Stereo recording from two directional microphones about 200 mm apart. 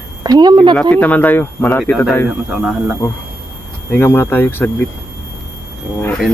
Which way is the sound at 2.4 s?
5° right (ahead or behind).